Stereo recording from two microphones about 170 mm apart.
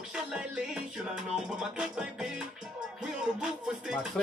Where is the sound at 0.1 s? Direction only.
5° right (ahead or behind).